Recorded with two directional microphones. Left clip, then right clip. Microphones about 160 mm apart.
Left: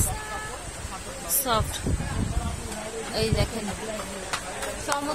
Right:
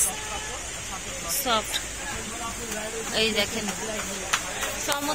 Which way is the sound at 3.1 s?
15° left (ahead or behind).